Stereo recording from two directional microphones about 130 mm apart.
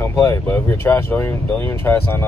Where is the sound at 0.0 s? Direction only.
20° left (ahead or behind).